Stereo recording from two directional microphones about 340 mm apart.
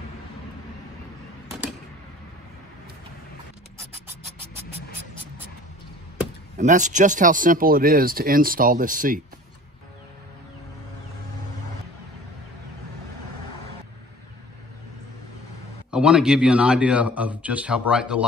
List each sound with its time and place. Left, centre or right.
6.6 s speech: right
15.9 s speech: centre